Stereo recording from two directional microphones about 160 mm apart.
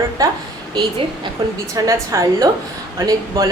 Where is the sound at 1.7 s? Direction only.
20° right (ahead or behind).